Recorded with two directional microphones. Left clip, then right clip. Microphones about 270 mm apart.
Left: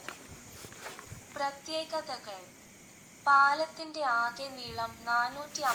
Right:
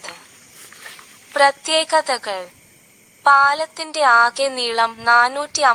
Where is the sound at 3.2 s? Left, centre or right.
Right.